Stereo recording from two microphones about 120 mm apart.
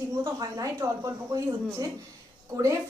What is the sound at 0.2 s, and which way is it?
A woman's voice, 30° right (ahead or behind).